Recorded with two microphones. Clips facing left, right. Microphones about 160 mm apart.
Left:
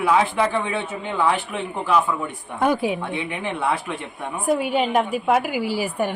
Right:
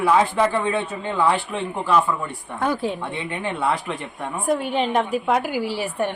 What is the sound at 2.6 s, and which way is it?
A man's voice, 10° left (ahead or behind).